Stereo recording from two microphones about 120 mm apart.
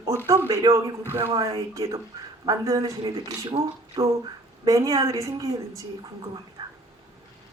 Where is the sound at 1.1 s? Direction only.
15° right (ahead or behind).